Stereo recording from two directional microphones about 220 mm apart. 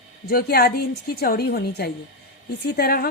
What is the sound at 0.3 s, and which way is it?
Speech, 45° left (ahead or behind).